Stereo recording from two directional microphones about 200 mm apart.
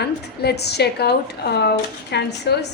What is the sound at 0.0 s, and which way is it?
Speech, 55° left (ahead or behind).